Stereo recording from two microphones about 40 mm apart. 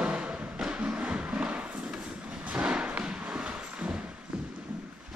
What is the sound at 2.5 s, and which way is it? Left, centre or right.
Thump, right.